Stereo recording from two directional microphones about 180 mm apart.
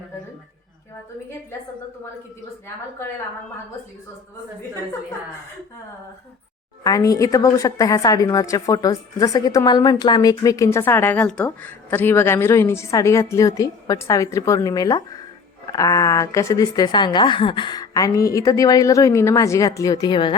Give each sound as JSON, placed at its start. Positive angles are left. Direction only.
{"t": 6.8, "sound": "a woman's voice", "side_deg": 20}